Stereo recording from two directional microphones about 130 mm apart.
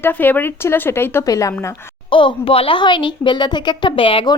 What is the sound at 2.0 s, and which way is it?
Speech, 40° left (ahead or behind).